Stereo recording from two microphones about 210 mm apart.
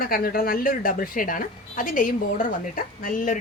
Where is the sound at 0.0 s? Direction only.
45° left (ahead or behind).